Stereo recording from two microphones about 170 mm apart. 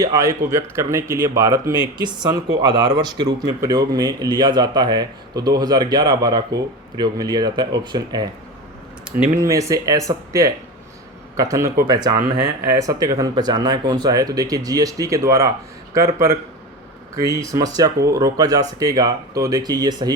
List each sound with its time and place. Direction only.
0.0 s speech: 20° right (ahead or behind)
9.1 s speech: 10° right (ahead or behind)